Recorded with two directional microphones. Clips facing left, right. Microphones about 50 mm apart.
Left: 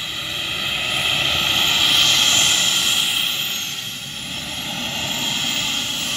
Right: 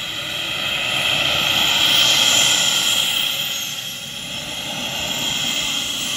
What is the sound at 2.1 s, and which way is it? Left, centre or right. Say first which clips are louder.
Vehicle: right 1 dB; centre.